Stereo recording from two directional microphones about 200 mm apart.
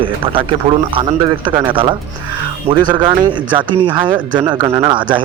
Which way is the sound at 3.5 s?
25° right (ahead or behind).